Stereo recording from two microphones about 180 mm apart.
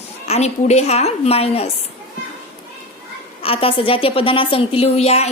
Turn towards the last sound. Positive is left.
turn(degrees=35)  # may be behind; listen again after turning